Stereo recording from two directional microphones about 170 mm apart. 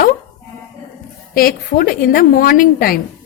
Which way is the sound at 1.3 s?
60° left (ahead or behind).